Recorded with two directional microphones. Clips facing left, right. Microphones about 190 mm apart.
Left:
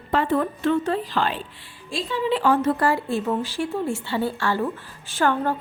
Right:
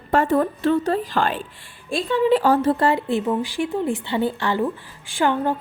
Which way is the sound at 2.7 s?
20° right (ahead or behind).